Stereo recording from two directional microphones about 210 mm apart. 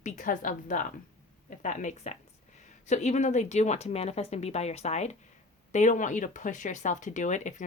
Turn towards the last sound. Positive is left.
turn(degrees=35)  # may be behind; listen again after turning